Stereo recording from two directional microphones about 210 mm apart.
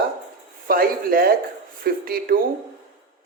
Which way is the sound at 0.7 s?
45° right (ahead or behind).